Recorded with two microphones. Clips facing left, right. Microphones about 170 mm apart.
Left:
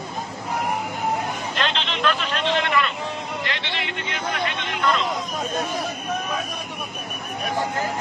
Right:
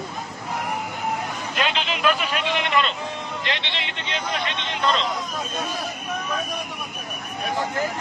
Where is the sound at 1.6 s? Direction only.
10° right (ahead or behind); by 5.0 s 25° right (ahead or behind).